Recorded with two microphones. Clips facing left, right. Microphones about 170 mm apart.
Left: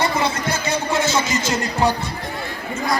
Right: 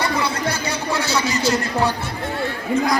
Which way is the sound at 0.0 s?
25° left (ahead or behind).